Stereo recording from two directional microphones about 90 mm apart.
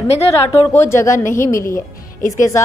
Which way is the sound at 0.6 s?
30° left (ahead or behind).